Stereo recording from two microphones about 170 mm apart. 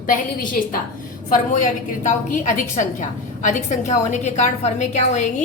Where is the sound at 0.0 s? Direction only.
55° left (ahead or behind).